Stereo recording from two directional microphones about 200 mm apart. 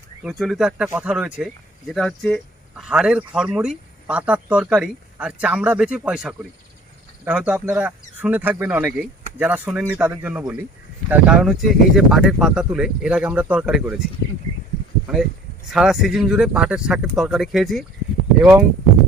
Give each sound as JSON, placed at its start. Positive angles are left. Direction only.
{"t": 0.2, "sound": "speech", "side_deg": 0}
{"t": 15.7, "sound": "speech", "side_deg": 0}